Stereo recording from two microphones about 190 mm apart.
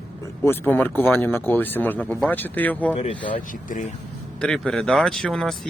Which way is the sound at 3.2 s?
45° left (ahead or behind).